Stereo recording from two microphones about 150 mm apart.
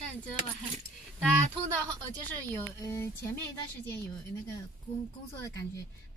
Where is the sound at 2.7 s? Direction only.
20° left (ahead or behind).